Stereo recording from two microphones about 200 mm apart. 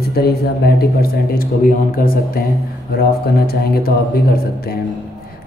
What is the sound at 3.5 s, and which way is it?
Speech, 50° left (ahead or behind).